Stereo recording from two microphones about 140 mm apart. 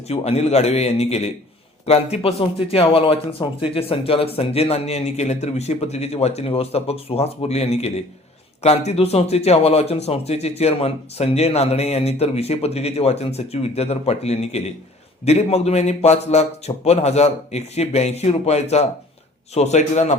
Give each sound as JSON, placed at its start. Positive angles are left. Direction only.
{"t": 0.1, "sound": "a man's voice", "side_deg": 50}